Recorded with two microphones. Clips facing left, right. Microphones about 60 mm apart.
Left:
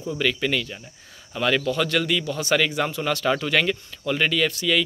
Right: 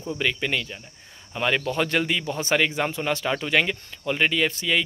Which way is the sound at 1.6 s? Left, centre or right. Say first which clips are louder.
Left 1 dB; right.